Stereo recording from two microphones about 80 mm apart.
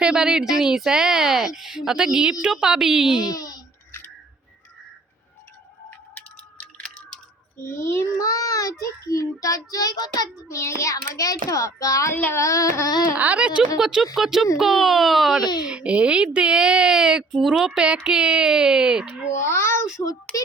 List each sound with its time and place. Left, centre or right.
0.0 s speech: centre
3.2 s a child's voice: left
7.6 s child singing: left
8.2 s child singing: left
10.5 s child singing: left
12.1 s speech: left
12.4 s child singing: left
12.9 s speech: left
13.1 s speech: centre
13.7 s speech: centre
15.6 s speech: centre
17.7 s speech: centre
19.5 s child singing: left